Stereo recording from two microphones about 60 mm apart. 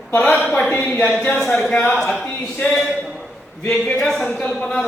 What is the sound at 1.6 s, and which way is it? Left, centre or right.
Speech, centre.